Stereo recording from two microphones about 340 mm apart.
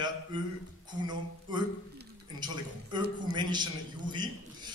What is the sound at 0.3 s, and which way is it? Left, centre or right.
Speech, centre.